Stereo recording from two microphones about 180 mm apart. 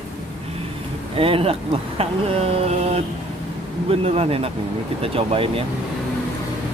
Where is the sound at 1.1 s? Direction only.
30° right (ahead or behind).